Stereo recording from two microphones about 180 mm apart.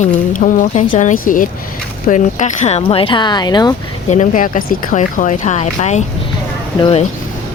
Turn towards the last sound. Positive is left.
turn(degrees=30)  # may be behind; listen again after turning